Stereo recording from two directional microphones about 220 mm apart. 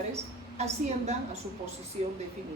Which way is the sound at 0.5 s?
30° right (ahead or behind).